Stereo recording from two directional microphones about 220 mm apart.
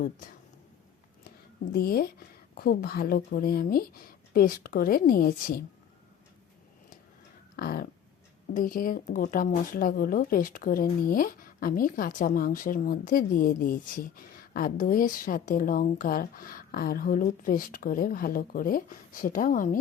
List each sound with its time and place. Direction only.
1.7 s speech: 45° left (ahead or behind)
7.5 s a sound: 40° left (ahead or behind)
8.5 s speech: 40° left (ahead or behind)